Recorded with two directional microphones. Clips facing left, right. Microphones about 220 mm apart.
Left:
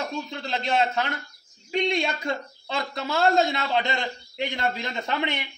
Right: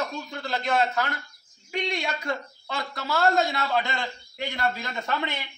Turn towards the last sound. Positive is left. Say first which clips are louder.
# left 2 dB
turn(degrees=20)  # may be behind; listen again after turning